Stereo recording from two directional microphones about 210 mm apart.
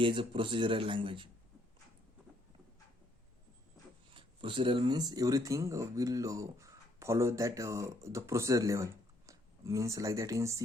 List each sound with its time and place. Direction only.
0.0 s speech: 25° right (ahead or behind)
4.1 s speech: 25° right (ahead or behind)